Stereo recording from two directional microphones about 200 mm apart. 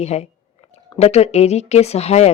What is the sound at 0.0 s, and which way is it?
Speech, 35° left (ahead or behind).